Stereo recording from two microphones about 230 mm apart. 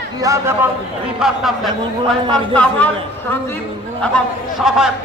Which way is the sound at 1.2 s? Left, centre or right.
Centre.